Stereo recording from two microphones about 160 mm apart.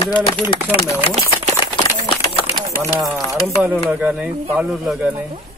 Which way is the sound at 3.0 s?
20° right (ahead or behind).